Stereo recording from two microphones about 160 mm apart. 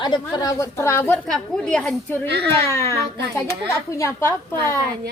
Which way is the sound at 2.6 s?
15° left (ahead or behind).